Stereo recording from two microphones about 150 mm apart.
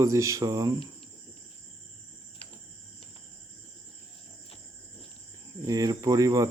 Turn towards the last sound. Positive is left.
turn(degrees=-25)  # may be behind; listen again after turning